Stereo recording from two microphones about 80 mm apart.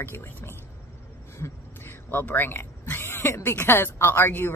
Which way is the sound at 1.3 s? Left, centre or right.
Left.